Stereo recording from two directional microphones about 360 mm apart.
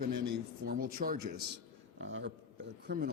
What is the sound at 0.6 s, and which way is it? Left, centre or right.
A man's voice, right.